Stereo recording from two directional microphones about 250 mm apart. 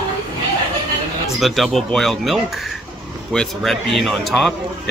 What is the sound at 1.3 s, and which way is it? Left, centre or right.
A man's voice, centre.